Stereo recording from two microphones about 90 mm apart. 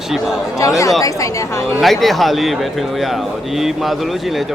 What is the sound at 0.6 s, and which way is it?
Speech, 35° left (ahead or behind).